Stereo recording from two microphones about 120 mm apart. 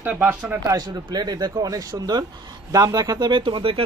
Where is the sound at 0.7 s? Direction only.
35° right (ahead or behind).